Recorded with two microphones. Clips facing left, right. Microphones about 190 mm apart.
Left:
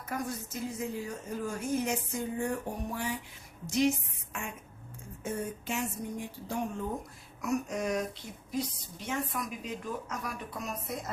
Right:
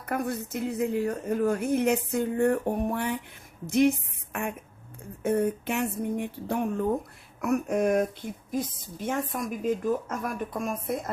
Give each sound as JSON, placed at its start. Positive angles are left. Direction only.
{"t": 0.0, "sound": "a woman's voice", "side_deg": -60}